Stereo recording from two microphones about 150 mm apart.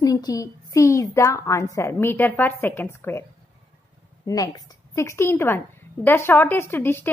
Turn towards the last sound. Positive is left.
turn(degrees=15)  # may be behind; listen again after turning